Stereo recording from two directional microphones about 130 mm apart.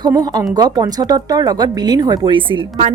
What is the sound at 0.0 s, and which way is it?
Speech, 30° right (ahead or behind).